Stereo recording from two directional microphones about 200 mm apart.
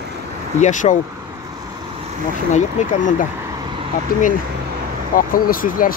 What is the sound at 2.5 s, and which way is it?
Speech, 40° left (ahead or behind).